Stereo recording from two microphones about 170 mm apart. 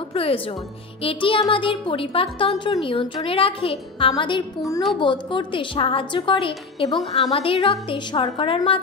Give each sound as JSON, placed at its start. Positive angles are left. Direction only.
{"t": 0.1, "sound": "music", "side_deg": 35}
{"t": 1.0, "sound": "a woman's voice", "side_deg": 30}
{"t": 6.9, "sound": "a woman's voice", "side_deg": 0}
{"t": 7.3, "sound": "speech", "side_deg": 35}